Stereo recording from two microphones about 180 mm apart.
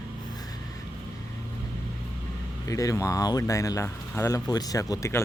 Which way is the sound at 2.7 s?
20° left (ahead or behind).